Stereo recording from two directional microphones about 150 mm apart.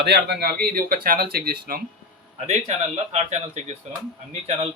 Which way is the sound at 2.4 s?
45° right (ahead or behind).